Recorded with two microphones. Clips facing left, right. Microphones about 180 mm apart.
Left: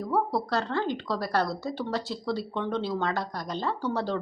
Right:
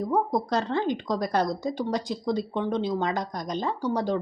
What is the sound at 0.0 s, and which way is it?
A woman's voice, 20° right (ahead or behind).